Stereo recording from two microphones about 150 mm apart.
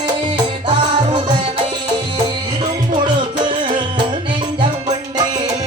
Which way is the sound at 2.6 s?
30° right (ahead or behind).